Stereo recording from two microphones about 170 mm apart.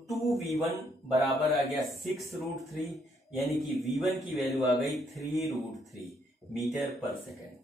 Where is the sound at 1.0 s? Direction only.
Centre (ahead or behind).